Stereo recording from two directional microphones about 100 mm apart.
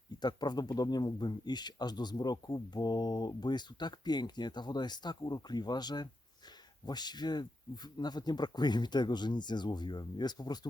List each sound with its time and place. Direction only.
0.2 s speech: 45° left (ahead or behind)